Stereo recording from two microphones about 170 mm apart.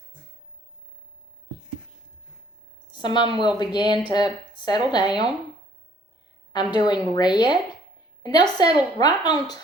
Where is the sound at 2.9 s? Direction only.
25° left (ahead or behind).